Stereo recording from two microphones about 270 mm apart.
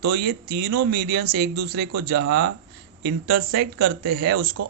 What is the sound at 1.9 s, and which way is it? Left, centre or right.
Speech, right.